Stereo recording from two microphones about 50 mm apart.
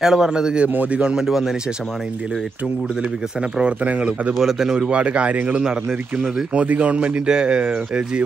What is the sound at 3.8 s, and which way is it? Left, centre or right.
Speech, right.